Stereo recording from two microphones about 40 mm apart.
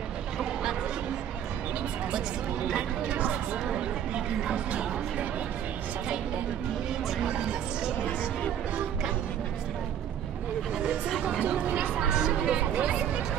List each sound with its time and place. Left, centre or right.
3.1 s a sound: right
7.2 s music: right
10.8 s a sound: centre
11.4 s chatter: right
11.9 s chatter: centre
12.4 s music: right